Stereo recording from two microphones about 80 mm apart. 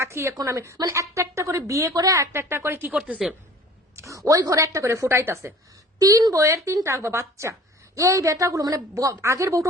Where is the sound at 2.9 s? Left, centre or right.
Centre.